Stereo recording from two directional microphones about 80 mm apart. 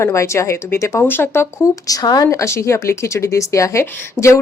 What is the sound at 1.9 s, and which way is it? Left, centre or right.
Speech, left.